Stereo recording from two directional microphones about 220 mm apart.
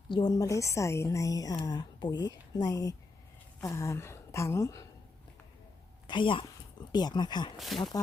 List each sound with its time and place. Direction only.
0.1 s a woman's voice: 20° left (ahead or behind)
6.1 s speech: 20° left (ahead or behind)
7.7 s speech: centre (ahead or behind)